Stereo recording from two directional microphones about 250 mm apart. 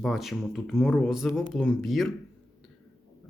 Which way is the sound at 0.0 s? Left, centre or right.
Centre.